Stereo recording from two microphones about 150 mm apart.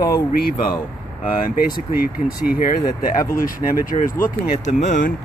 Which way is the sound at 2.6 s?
70° left (ahead or behind).